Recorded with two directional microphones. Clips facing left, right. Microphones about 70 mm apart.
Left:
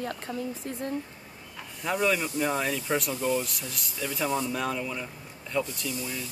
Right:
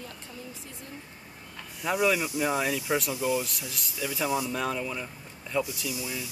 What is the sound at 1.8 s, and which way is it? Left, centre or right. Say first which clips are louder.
Speech: right 1 dB; centre.